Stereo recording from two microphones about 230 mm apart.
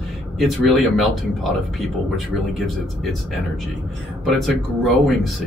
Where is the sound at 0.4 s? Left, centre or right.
Centre.